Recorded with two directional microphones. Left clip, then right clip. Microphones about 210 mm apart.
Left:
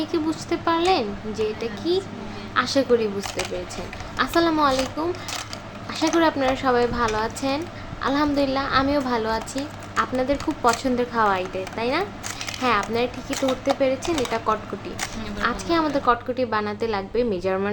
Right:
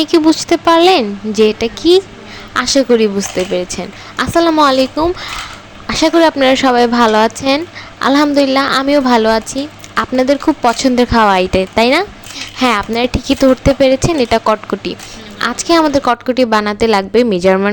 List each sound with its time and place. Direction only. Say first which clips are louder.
0.0 s a woman's voice: right 14 dB; 40° right (ahead or behind)